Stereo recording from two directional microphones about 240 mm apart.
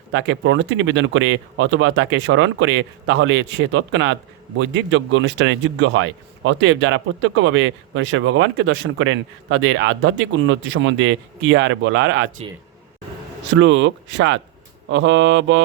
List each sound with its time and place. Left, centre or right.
0.1 s speech: right
13.5 s speech: right